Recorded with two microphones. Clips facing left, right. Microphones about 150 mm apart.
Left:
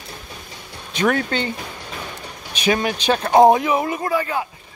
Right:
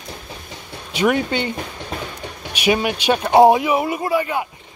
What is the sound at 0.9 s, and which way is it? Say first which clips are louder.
Speech: right 2 dB; 10° right (ahead or behind).